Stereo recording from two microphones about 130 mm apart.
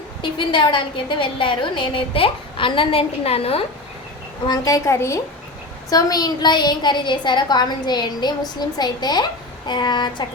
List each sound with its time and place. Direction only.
0.2 s a woman's voice: 40° left (ahead or behind)
4.4 s a woman's voice: 30° left (ahead or behind)